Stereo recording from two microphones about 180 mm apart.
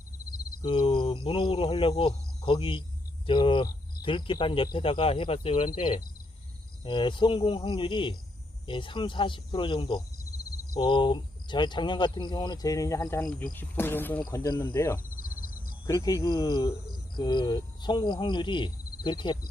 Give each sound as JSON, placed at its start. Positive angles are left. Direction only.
{"t": 0.6, "sound": "speech", "side_deg": 25}
{"t": 15.4, "sound": "a sound", "side_deg": 50}
{"t": 15.9, "sound": "speech", "side_deg": 20}